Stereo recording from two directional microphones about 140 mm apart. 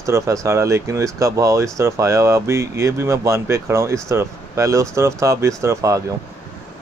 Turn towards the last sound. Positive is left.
turn(degrees=-20)  # may be behind; listen again after turning